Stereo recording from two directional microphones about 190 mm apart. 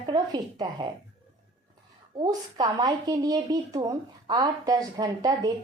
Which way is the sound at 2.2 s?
20° right (ahead or behind).